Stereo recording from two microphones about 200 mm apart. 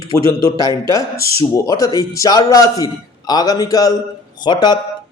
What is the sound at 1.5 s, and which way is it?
A man's voice, 15° left (ahead or behind).